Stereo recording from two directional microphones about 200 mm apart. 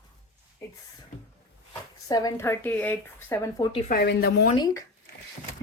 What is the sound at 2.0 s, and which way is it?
Speech, 15° left (ahead or behind).